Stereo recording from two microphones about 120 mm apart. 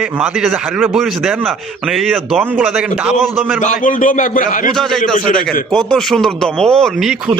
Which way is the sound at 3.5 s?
90° left.